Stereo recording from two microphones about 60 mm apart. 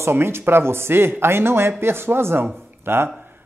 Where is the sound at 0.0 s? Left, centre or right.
Right.